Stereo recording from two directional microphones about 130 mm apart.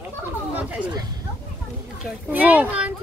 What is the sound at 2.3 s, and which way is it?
Speech, 15° right (ahead or behind).